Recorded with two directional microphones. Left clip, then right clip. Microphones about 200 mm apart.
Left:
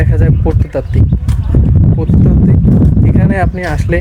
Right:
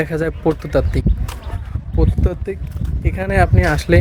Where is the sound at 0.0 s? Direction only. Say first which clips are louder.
Left 1 dB; 10° right (ahead or behind).